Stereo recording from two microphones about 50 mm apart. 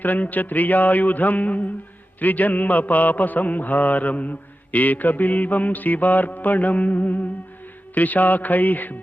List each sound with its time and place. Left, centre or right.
0.0 s a man's voice: left